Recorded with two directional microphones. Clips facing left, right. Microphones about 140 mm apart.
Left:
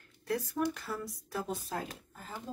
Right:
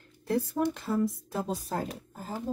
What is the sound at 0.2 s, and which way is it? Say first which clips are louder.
Speech: right 5 dB; 30° right (ahead or behind).